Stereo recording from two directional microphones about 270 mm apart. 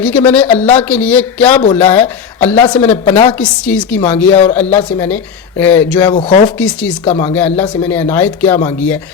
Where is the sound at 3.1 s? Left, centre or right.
Centre.